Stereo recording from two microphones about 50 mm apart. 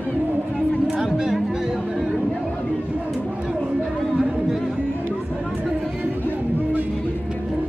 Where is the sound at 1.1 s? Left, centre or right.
Centre.